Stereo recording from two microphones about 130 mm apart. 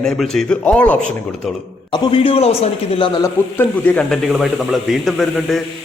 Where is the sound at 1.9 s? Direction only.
35° left (ahead or behind).